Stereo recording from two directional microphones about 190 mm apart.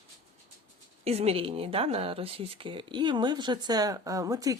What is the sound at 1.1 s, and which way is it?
Speech, 35° right (ahead or behind).